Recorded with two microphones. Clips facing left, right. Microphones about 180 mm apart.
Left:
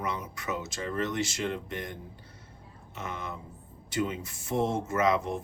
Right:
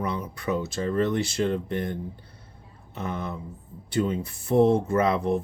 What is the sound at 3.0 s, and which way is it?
Speech, 35° right (ahead or behind).